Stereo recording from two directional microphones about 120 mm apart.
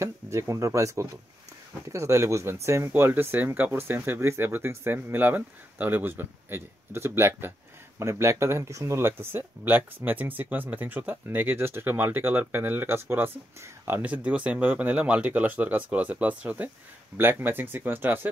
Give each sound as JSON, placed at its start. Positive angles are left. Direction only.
{"t": 0.0, "sound": "speech", "side_deg": -25}